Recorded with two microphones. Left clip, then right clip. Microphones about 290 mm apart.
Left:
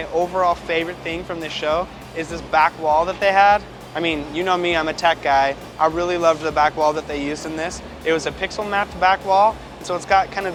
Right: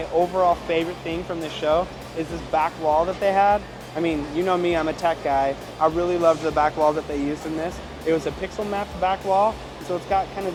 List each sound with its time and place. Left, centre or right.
0.3 s speech: left